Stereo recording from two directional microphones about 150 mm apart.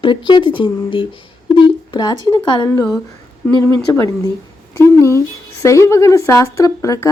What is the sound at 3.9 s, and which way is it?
A woman's voice, 20° left (ahead or behind).